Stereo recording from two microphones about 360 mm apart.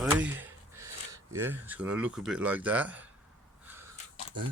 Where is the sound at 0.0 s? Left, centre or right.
Centre.